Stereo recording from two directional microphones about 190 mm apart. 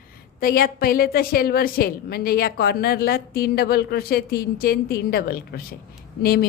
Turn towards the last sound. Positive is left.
turn(degrees=55)  # may be behind; listen again after turning